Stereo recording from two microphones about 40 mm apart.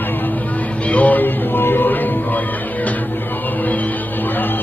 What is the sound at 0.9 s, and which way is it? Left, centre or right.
Music, left.